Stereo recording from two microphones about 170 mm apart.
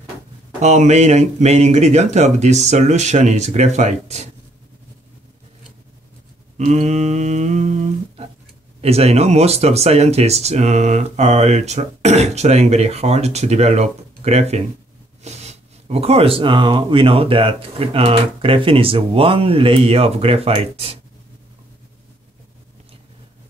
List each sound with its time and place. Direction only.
0.6 s speech: 40° right (ahead or behind)
6.6 s speech: 40° right (ahead or behind)